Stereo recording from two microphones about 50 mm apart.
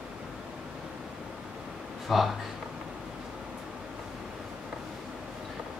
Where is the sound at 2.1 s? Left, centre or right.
Centre.